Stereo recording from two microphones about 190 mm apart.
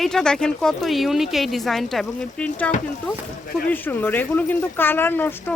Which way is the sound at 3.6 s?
10° left (ahead or behind).